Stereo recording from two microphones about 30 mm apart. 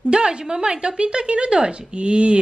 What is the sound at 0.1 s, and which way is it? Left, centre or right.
A woman's voice, right.